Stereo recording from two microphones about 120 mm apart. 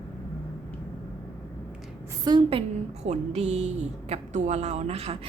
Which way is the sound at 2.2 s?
40° right (ahead or behind).